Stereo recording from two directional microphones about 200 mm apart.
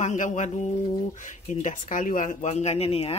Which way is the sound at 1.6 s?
40° left (ahead or behind).